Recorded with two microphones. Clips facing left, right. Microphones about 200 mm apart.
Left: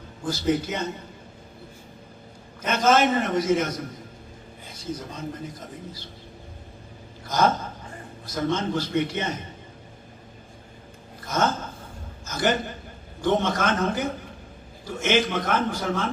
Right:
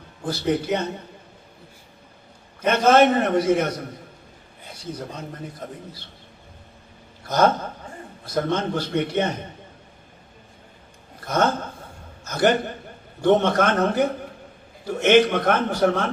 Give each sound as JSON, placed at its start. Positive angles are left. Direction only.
{"t": 0.3, "sound": "speech", "side_deg": -60}
{"t": 2.6, "sound": "speech", "side_deg": -60}
{"t": 7.3, "sound": "a sound", "side_deg": -60}
{"t": 8.3, "sound": "speech", "side_deg": -60}
{"t": 11.3, "sound": "a sound", "side_deg": -60}
{"t": 12.2, "sound": "a man's voice", "side_deg": -60}